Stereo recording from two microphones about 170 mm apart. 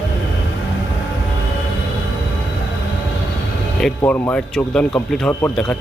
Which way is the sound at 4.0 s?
10° left (ahead or behind).